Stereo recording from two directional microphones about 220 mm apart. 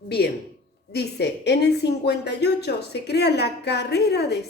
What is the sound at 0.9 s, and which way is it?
A woman's voice, 50° left (ahead or behind).